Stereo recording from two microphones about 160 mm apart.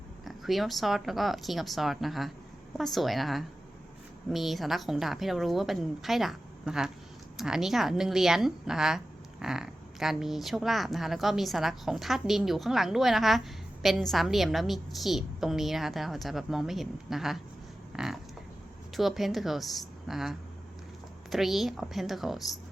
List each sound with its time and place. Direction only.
0.3 s a woman's voice: centre (ahead or behind)
17.9 s a sound: 5° right (ahead or behind)
18.9 s a woman's voice: centre (ahead or behind)